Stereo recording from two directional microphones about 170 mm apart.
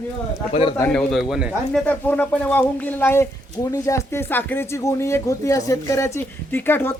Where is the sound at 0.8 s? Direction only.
5° left (ahead or behind).